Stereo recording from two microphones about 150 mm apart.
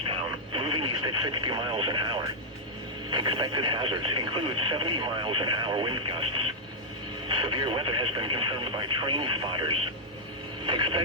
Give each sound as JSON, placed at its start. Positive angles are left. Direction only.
{"t": 0.1, "sound": "radio", "side_deg": -35}
{"t": 3.1, "sound": "speech", "side_deg": -30}